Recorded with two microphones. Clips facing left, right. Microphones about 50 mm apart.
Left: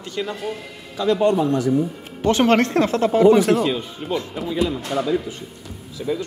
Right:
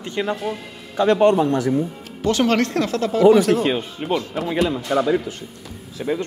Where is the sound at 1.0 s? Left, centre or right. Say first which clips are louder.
Right 3 dB; right.